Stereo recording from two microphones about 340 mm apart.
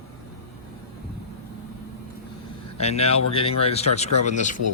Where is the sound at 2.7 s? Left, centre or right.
Centre.